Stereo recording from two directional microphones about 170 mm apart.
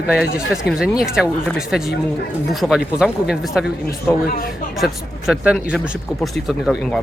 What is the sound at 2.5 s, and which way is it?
Speech, centre (ahead or behind).